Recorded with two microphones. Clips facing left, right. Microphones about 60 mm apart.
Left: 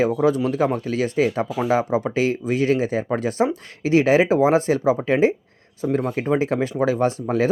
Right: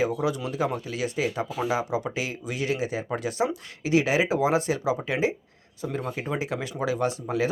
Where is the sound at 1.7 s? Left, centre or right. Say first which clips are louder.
Left 7 dB; left.